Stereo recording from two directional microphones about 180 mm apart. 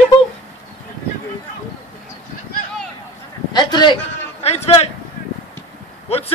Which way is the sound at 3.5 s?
25° left (ahead or behind).